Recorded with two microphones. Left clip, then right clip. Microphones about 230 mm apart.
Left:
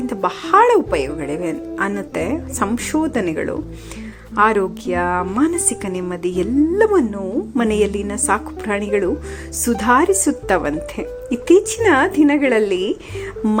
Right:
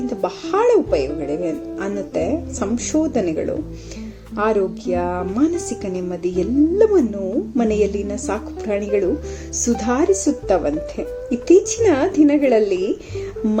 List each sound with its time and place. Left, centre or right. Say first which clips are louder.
0.1 s a woman's voice: left 8 dB; centre